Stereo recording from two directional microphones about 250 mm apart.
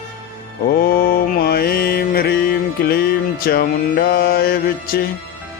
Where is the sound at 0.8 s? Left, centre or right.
Left.